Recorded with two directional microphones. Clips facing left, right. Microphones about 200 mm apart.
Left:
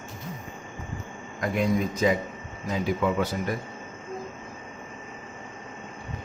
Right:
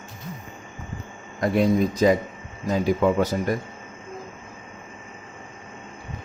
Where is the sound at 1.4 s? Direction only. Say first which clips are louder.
Right 5 dB; 35° right (ahead or behind).